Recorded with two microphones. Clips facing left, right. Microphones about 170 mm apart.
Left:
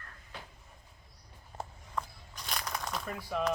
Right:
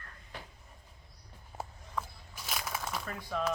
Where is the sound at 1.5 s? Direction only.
5° right (ahead or behind).